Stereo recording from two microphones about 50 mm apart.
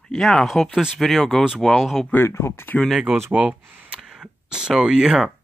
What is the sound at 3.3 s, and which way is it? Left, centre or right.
Speech, right.